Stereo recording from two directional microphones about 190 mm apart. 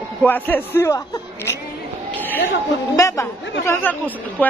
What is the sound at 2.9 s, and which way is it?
A woman's voice, 15° left (ahead or behind).